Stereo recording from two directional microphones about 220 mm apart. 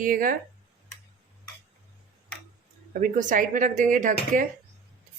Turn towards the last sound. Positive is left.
turn(degrees=-35)  # may be behind; listen again after turning